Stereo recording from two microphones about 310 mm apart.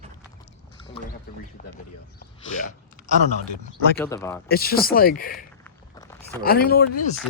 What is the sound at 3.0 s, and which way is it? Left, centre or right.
Speech, left.